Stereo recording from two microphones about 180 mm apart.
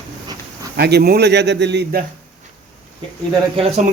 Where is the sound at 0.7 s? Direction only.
65° right (ahead or behind).